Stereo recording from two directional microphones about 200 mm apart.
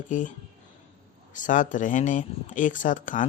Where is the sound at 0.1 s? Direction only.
40° left (ahead or behind).